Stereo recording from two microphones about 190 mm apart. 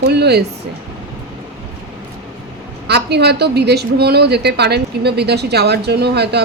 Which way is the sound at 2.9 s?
60° right (ahead or behind).